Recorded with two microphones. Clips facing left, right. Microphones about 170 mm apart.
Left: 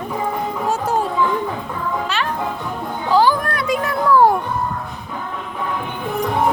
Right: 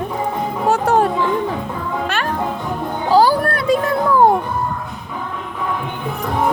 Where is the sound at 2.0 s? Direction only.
50° right (ahead or behind).